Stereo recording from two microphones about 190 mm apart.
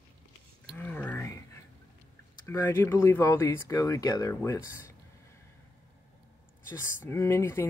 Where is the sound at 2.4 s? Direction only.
15° left (ahead or behind).